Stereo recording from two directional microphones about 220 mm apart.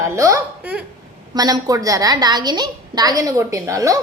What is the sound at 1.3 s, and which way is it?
A woman's voice, 15° right (ahead or behind).